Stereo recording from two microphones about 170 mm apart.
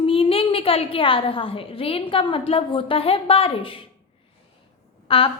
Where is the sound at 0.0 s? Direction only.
35° left (ahead or behind).